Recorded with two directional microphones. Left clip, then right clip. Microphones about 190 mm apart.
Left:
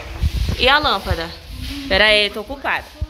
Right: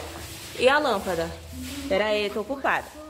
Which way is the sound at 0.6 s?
5° right (ahead or behind).